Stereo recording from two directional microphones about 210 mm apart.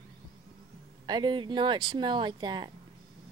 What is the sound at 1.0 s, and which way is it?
Speech, 20° right (ahead or behind).